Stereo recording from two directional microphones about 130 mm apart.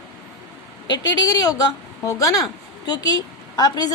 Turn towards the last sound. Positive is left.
turn(degrees=30)  # may be behind; listen again after turning